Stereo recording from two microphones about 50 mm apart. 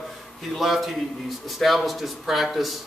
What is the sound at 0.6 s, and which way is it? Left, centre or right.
A man's voice, centre.